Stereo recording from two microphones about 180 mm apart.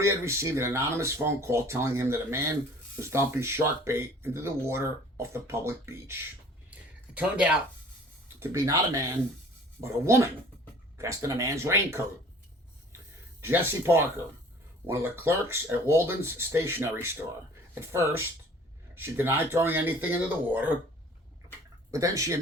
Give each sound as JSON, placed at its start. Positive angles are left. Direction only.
{"t": 0.0, "sound": "speech", "side_deg": -15}
{"t": 6.7, "sound": "a sound", "side_deg": -5}
{"t": 8.4, "sound": "speech", "side_deg": -15}
{"t": 13.4, "sound": "speech", "side_deg": -10}
{"t": 21.9, "sound": "speech", "side_deg": -15}